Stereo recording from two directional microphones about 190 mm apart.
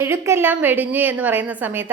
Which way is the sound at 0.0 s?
15° right (ahead or behind).